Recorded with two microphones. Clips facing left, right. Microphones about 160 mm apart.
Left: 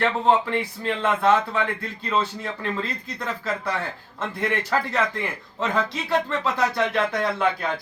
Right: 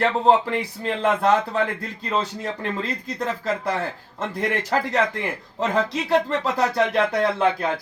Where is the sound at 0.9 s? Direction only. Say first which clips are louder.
Right 1 dB; 35° right (ahead or behind).